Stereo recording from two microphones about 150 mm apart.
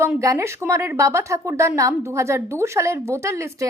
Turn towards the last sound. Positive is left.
turn(degrees=-20)  # may be behind; listen again after turning